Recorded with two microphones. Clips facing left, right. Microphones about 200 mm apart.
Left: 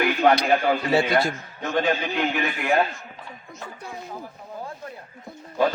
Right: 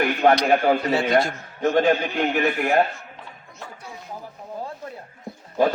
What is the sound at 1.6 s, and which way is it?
A man's voice, 50° right (ahead or behind).